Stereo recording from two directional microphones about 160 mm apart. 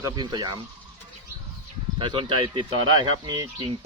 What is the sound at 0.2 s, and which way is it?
Speech, 25° right (ahead or behind).